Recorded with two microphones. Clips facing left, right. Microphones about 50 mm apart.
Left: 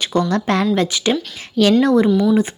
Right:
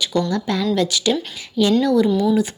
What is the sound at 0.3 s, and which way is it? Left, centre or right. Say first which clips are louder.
Speech: left 4 dB; left.